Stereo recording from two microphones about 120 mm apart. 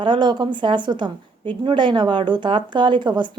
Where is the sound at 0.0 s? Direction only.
40° right (ahead or behind).